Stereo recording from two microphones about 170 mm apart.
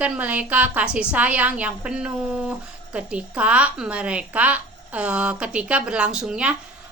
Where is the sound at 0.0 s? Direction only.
10° right (ahead or behind).